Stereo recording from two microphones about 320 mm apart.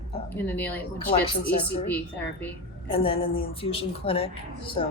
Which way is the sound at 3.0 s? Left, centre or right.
Centre.